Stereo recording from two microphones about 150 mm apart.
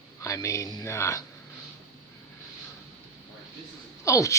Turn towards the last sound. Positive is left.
turn(degrees=20)  # may be behind; listen again after turning